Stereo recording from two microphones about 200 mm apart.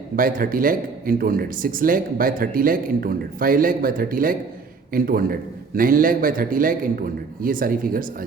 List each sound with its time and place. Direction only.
0.2 s speech: 45° right (ahead or behind)